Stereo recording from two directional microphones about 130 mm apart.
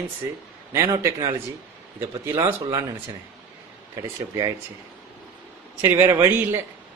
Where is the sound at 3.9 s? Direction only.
30° right (ahead or behind).